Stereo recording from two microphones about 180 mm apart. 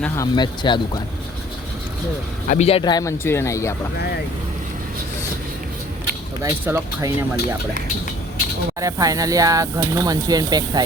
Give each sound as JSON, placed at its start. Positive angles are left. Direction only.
{"t": 0.2, "sound": "speech", "side_deg": 25}
{"t": 2.5, "sound": "speech", "side_deg": 35}
{"t": 6.4, "sound": "speech", "side_deg": -15}
{"t": 8.8, "sound": "speech", "side_deg": -20}